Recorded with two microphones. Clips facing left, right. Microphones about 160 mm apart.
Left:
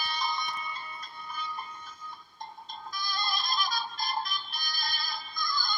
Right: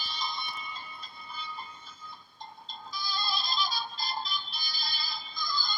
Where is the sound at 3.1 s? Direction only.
50° left (ahead or behind).